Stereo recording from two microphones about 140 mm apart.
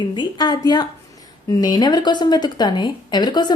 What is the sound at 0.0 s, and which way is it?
A woman's voice, 35° left (ahead or behind).